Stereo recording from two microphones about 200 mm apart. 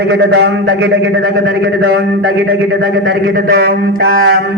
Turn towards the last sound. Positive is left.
turn(degrees=-50)  # may be behind; listen again after turning